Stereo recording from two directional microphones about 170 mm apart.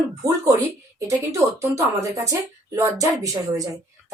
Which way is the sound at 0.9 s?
20° right (ahead or behind).